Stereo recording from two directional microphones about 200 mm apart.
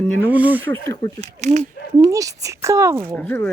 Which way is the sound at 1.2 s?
35° right (ahead or behind).